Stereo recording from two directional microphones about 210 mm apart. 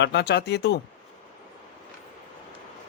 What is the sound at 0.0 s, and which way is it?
Speech, 55° left (ahead or behind).